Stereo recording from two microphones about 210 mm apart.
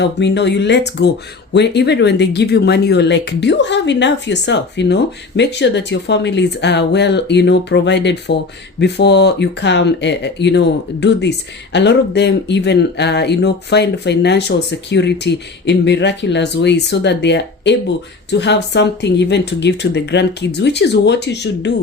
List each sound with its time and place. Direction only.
0.0 s speech: 55° left (ahead or behind)